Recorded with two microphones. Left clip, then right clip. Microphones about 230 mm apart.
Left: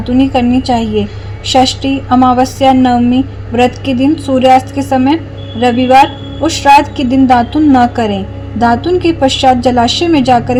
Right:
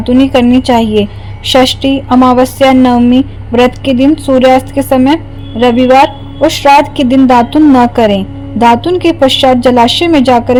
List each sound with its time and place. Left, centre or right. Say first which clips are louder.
0.0 s a woman's voice: right 4 dB; right